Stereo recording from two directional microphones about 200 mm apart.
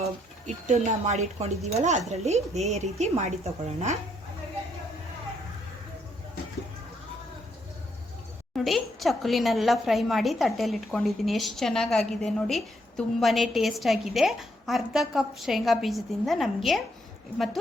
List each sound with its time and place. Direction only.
0.0 s speech: 35° right (ahead or behind)
8.5 s a woman's voice: centre (ahead or behind)